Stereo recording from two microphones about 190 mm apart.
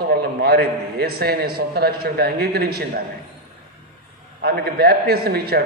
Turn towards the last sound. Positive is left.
turn(degrees=-55)  # may be behind; listen again after turning